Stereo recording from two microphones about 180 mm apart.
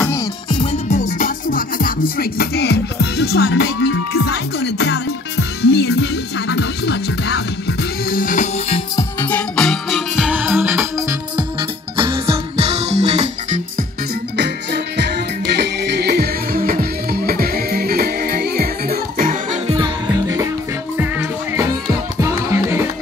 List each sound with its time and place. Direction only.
0.5 s music: 30° left (ahead or behind)
0.8 s music: 45° left (ahead or behind); by 7.4 s 70° left (ahead or behind)
8.1 s music: 50° left (ahead or behind)
8.6 s music: 30° left (ahead or behind)
9.2 s music: 5° left (ahead or behind); by 11.4 s 15° right (ahead or behind)
12.0 s music: 30° right (ahead or behind)
14.3 s music: 70° right (ahead or behind); by 19.6 s 50° right (ahead or behind)
19.7 s music: 20° right (ahead or behind)